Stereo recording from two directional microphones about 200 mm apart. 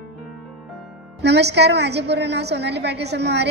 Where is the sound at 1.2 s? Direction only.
55° right (ahead or behind).